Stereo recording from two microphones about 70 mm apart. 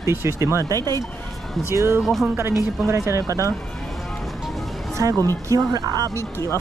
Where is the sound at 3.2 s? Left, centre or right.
Right.